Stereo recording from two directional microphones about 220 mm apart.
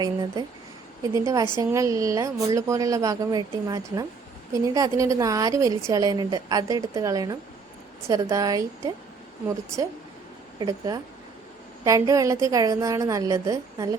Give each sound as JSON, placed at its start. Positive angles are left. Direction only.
{"t": 0.0, "sound": "speech", "side_deg": -20}
{"t": 10.6, "sound": "speech", "side_deg": -15}